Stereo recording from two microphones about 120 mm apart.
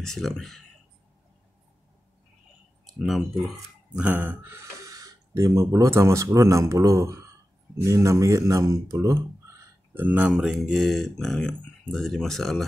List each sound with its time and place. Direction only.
0.0 s speech: 5° left (ahead or behind)
2.9 s speech: centre (ahead or behind)